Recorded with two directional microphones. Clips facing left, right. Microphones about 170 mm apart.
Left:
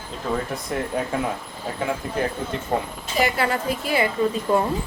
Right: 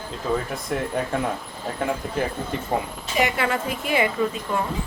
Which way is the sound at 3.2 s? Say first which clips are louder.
Left 1 dB; 35° left (ahead or behind).